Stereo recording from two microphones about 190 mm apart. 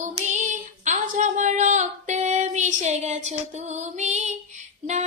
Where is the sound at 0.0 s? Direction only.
40° right (ahead or behind).